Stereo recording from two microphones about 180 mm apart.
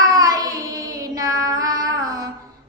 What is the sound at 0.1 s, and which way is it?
Child singing, 20° right (ahead or behind).